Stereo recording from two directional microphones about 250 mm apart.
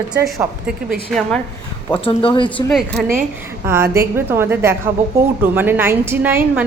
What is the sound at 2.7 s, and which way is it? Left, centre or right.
Speech, centre.